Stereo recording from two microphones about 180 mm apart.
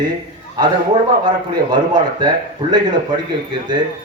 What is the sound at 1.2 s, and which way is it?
A man's voice, 25° right (ahead or behind).